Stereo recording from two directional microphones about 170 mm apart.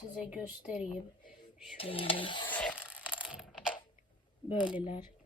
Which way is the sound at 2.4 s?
10° left (ahead or behind).